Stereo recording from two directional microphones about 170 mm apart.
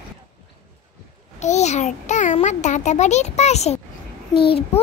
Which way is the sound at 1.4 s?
40° left (ahead or behind).